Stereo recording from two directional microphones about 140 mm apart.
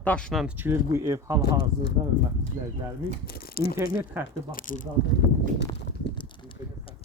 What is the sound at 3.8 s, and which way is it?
Speech, 15° right (ahead or behind).